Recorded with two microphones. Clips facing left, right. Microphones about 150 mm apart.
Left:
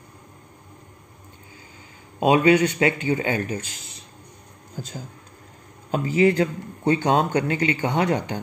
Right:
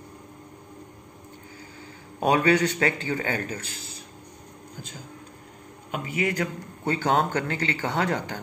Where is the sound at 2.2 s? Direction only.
15° left (ahead or behind).